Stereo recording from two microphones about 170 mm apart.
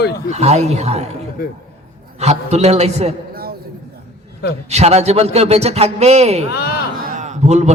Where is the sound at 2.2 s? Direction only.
40° right (ahead or behind).